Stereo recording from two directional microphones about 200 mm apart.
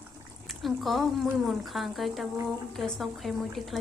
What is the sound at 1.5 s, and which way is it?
A woman's voice, centre (ahead or behind).